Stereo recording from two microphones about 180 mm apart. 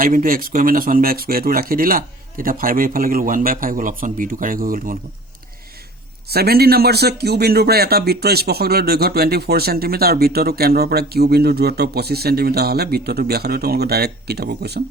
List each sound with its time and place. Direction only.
0.0 s speech: 50° right (ahead or behind)
6.3 s speech: 60° right (ahead or behind)